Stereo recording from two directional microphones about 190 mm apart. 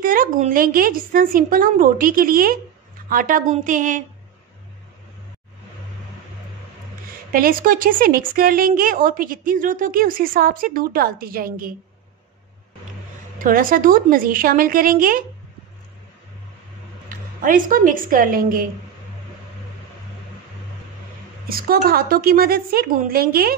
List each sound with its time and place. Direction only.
0.0 s a woman's voice: 45° right (ahead or behind)
7.3 s a woman's voice: 50° right (ahead or behind)
13.4 s a woman's voice: 45° right (ahead or behind)
17.4 s a woman's voice: 45° right (ahead or behind)
21.5 s a woman's voice: 50° right (ahead or behind)